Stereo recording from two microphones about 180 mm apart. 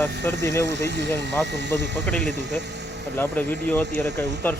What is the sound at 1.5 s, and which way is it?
Speech, 75° right (ahead or behind).